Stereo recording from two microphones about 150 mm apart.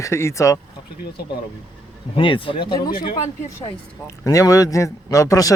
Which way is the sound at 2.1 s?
35° left (ahead or behind).